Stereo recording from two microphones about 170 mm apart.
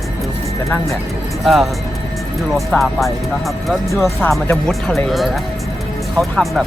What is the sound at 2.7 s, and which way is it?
Speech, centre (ahead or behind).